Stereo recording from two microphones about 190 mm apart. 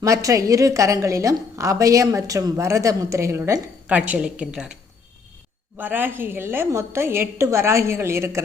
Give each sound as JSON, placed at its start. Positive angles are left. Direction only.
{"t": 0.0, "sound": "a woman's voice", "side_deg": -15}
{"t": 5.7, "sound": "a woman's voice", "side_deg": -10}